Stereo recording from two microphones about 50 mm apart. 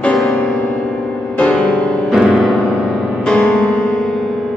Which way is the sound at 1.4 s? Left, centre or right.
Left.